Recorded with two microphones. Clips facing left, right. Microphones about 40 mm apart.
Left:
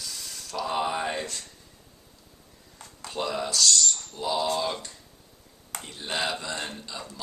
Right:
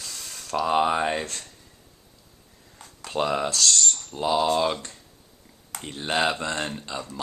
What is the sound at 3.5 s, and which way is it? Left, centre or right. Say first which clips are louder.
Speech: right 1 dB; right.